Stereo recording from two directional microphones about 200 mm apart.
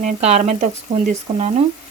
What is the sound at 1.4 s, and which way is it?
Frying, 30° right (ahead or behind).